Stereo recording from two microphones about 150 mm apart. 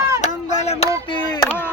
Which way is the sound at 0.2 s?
50° left (ahead or behind).